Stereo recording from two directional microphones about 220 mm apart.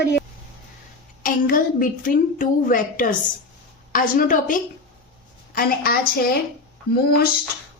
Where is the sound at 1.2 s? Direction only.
40° left (ahead or behind).